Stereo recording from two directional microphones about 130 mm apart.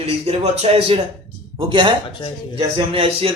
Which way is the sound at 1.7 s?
40° right (ahead or behind).